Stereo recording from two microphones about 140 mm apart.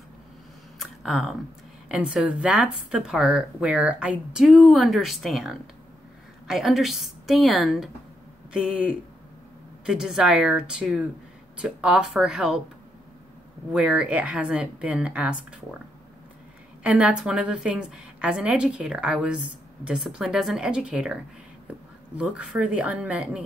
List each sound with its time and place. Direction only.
0.7 s a sound: centre (ahead or behind)
1.9 s a woman's voice: 5° right (ahead or behind)
13.7 s a woman's voice: 5° right (ahead or behind)
16.8 s a woman's voice: 10° right (ahead or behind)